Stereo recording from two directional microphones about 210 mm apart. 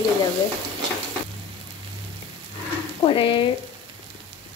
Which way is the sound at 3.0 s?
25° left (ahead or behind).